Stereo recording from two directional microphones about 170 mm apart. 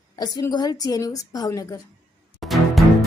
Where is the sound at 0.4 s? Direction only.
25° left (ahead or behind).